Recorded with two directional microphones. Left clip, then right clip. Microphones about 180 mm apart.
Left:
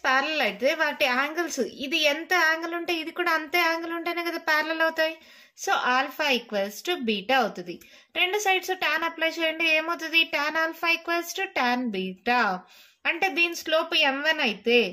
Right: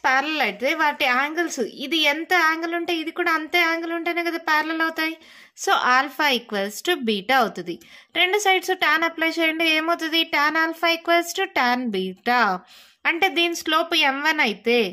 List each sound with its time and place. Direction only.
0.0 s a woman's voice: 35° right (ahead or behind)